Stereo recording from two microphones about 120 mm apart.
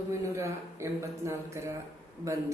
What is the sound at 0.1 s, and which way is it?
Speech, 25° right (ahead or behind).